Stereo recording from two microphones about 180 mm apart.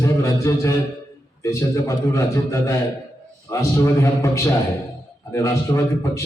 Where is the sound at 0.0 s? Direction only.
15° left (ahead or behind).